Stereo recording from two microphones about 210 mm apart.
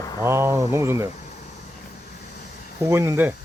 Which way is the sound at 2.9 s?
10° right (ahead or behind).